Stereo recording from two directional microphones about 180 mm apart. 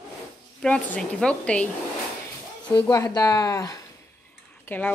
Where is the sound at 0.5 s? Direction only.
5° left (ahead or behind).